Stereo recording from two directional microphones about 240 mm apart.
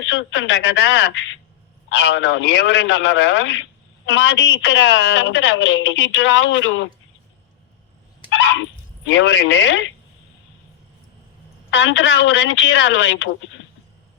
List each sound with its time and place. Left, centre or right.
0.0 s a woman's voice: left
9.0 s a woman's voice: left
11.7 s a woman's voice: left